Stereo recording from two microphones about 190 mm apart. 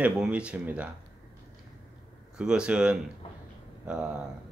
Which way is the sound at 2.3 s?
5° right (ahead or behind).